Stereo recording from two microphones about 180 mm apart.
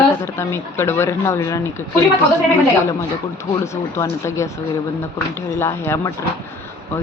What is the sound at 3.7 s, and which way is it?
Speech, 15° left (ahead or behind).